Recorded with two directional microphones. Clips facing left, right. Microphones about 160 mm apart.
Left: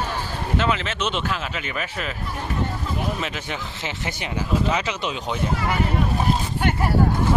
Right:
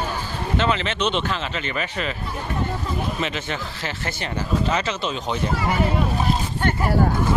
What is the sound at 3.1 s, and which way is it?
Speech, 5° left (ahead or behind).